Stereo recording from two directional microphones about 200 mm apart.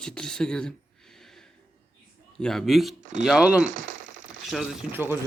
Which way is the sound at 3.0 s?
40° right (ahead or behind).